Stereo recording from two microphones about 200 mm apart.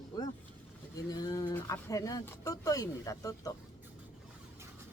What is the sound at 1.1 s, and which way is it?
Speech, 20° left (ahead or behind).